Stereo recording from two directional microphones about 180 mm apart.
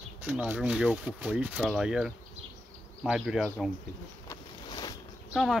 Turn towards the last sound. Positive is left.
turn(degrees=0)  # may be behind; listen again after turning